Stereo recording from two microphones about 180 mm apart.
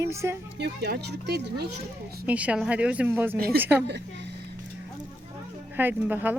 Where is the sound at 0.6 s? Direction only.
65° right (ahead or behind).